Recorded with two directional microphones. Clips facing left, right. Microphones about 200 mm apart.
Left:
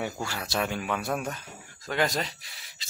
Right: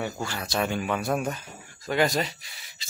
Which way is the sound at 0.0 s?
5° left (ahead or behind).